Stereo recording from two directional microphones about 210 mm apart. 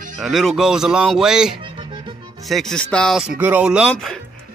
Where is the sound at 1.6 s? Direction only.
25° right (ahead or behind).